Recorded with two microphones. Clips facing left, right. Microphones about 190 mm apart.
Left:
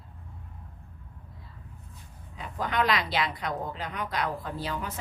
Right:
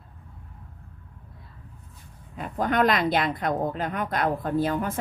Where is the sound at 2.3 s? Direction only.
50° right (ahead or behind).